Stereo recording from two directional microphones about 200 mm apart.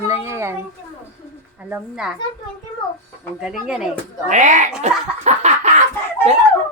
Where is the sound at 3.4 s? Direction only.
5° right (ahead or behind).